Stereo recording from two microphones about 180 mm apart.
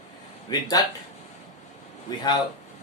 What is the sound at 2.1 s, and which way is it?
Speech, 20° left (ahead or behind).